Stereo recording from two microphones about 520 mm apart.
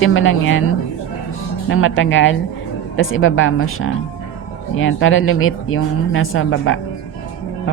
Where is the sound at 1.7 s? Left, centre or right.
Left.